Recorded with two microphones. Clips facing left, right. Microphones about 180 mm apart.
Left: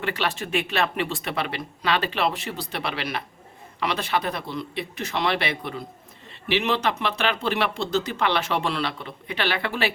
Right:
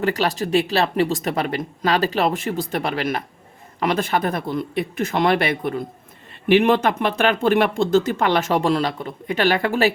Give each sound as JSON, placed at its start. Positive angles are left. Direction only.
{"t": 0.0, "sound": "speech", "side_deg": -40}